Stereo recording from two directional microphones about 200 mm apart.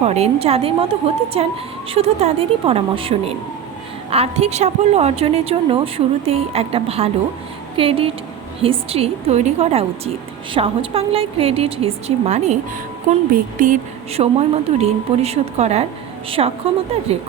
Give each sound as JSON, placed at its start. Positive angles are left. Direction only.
{"t": 0.0, "sound": "a woman's voice", "side_deg": -30}